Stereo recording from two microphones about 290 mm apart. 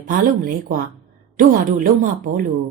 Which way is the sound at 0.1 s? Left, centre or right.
Right.